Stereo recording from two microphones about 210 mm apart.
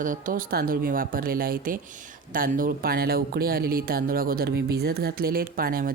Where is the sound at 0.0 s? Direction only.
40° right (ahead or behind).